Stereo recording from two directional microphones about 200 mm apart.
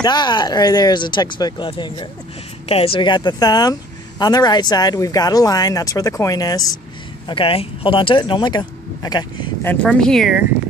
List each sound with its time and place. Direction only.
0.0 s speech: 20° left (ahead or behind); by 10.4 s centre (ahead or behind)